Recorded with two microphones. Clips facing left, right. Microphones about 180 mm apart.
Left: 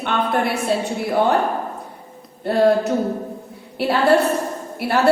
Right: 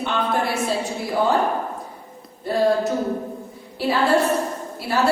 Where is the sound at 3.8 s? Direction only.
65° left (ahead or behind).